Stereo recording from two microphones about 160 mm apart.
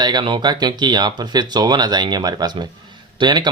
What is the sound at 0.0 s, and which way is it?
Speech, 25° right (ahead or behind).